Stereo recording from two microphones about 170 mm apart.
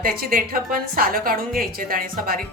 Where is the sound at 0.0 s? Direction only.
60° right (ahead or behind).